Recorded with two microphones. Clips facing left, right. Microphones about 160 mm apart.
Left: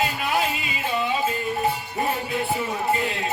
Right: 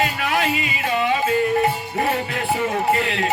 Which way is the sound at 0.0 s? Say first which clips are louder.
Right 2 dB; 80° right.